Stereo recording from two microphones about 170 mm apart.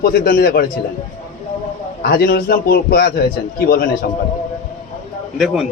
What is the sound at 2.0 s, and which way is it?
A man's voice, 65° left (ahead or behind).